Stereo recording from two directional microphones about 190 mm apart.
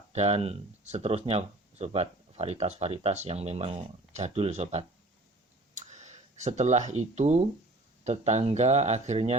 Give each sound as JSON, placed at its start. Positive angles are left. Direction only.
{"t": 0.1, "sound": "speech", "side_deg": -35}
{"t": 5.7, "sound": "a sound", "side_deg": -40}
{"t": 8.0, "sound": "speech", "side_deg": -35}